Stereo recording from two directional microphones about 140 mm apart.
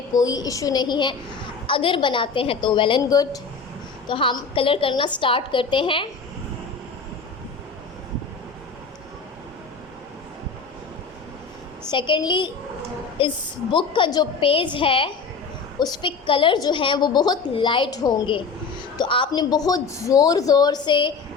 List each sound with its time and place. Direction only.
0.1 s a woman's voice: 25° left (ahead or behind)
4.0 s a woman's voice: 35° left (ahead or behind)
11.9 s a woman's voice: 35° left (ahead or behind)